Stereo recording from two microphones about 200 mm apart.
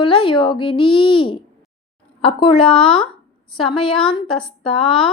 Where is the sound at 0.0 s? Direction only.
25° left (ahead or behind).